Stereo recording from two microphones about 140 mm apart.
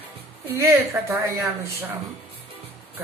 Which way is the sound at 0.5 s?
15° right (ahead or behind).